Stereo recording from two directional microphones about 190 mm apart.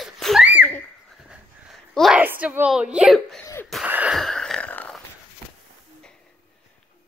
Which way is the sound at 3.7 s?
5° right (ahead or behind).